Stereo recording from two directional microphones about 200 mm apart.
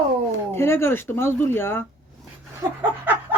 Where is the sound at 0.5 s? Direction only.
10° left (ahead or behind).